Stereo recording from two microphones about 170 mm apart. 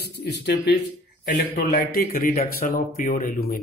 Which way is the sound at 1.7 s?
60° left (ahead or behind).